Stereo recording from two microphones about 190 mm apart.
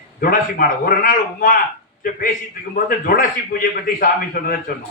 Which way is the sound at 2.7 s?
50° left (ahead or behind).